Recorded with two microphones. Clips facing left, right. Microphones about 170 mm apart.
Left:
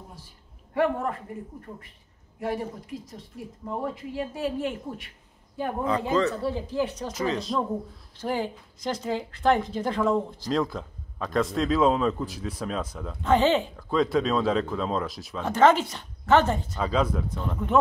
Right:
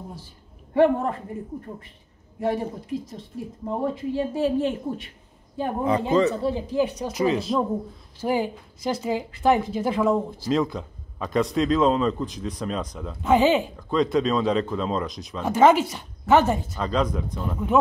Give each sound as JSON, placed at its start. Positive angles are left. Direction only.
{"t": 0.7, "sound": "speech", "side_deg": -30}
{"t": 3.6, "sound": "speech", "side_deg": -25}
{"t": 13.7, "sound": "speech", "side_deg": 5}
{"t": 15.4, "sound": "speech", "side_deg": -10}
{"t": 16.8, "sound": "speech", "side_deg": 5}
{"t": 17.4, "sound": "speech", "side_deg": -5}